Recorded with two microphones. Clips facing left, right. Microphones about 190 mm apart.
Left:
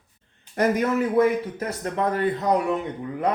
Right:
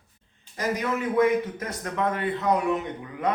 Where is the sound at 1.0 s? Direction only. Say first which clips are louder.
Right 1 dB; 30° left (ahead or behind).